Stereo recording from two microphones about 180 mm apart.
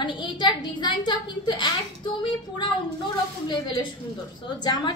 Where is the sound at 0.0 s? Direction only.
25° left (ahead or behind).